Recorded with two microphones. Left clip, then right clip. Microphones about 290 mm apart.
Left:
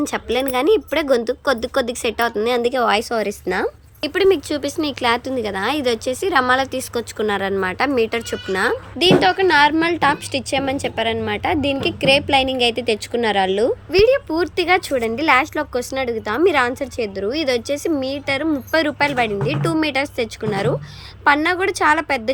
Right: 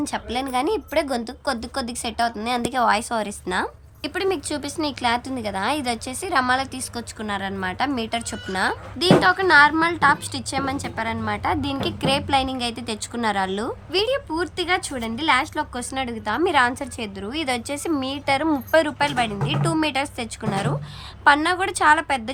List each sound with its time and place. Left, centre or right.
0.0 s a woman's voice: centre